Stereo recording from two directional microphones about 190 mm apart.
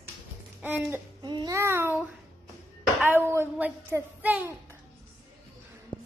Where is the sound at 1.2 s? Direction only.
20° right (ahead or behind).